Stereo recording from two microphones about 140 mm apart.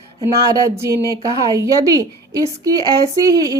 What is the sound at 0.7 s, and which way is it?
A woman's voice, 20° right (ahead or behind).